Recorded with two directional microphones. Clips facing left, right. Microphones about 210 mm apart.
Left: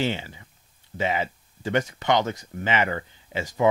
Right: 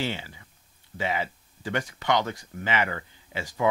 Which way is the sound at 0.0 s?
20° left (ahead or behind).